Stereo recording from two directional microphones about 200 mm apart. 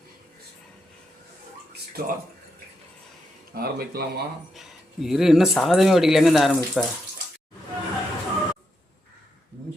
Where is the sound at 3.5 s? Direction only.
50° right (ahead or behind).